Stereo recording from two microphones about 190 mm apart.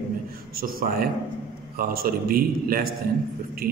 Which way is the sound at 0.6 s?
50° right (ahead or behind).